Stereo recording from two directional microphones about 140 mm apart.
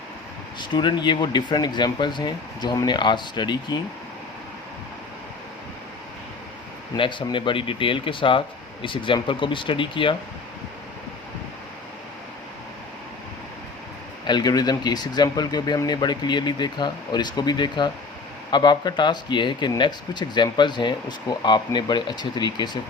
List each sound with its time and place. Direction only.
0.7 s speech: 35° left (ahead or behind)
6.9 s speech: 35° left (ahead or behind)
14.3 s speech: 30° left (ahead or behind)